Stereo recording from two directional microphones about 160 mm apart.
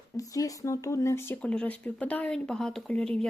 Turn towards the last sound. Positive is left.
turn(degrees=5)  # may be behind; listen again after turning